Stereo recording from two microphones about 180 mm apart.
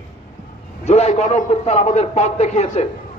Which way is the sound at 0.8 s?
35° left (ahead or behind).